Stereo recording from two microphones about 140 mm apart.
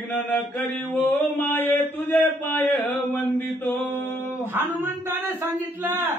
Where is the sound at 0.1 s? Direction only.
10° left (ahead or behind).